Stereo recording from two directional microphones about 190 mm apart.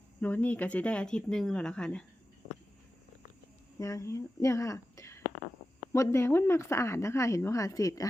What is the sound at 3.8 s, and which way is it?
Speech, 15° left (ahead or behind).